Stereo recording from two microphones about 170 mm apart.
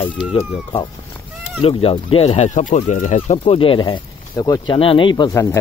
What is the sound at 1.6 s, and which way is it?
Speech, 35° left (ahead or behind).